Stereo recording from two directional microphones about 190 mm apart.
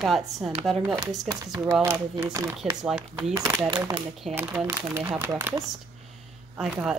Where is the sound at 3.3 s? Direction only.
15° right (ahead or behind).